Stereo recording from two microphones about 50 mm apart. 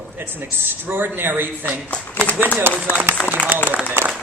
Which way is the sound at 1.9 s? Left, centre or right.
Left.